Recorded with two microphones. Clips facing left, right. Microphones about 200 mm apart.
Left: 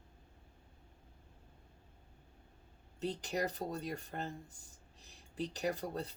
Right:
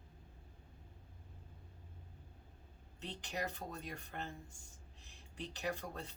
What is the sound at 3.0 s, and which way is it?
Speech, 40° left (ahead or behind).